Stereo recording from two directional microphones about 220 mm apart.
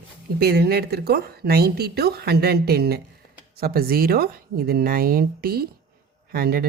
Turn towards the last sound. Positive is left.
turn(degrees=-40)  # may be behind; listen again after turning